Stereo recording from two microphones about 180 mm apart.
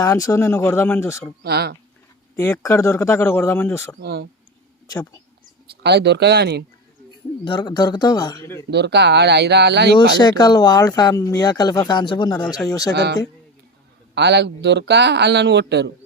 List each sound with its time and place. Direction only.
0.0 s speech: 20° left (ahead or behind)
1.4 s speech: 65° right (ahead or behind)
2.3 s speech: 15° left (ahead or behind)
4.0 s speech: 65° right (ahead or behind)
5.8 s a man's voice: 65° right (ahead or behind)
7.4 s speech: 25° left (ahead or behind)
8.7 s a man's voice: 70° right (ahead or behind)
10.2 s speech: 25° left (ahead or behind)
12.9 s a man's voice: 65° right (ahead or behind)
14.2 s a man's voice: 70° right (ahead or behind)